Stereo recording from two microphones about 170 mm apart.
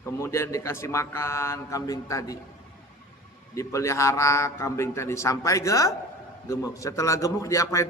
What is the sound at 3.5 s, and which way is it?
A man's voice, 20° left (ahead or behind).